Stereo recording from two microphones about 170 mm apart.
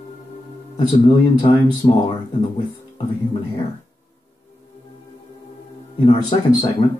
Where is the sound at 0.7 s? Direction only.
25° left (ahead or behind).